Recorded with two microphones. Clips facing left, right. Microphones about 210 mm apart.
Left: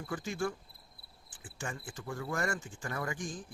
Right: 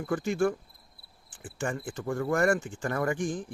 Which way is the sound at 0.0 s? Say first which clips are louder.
Right 9 dB; 60° right (ahead or behind).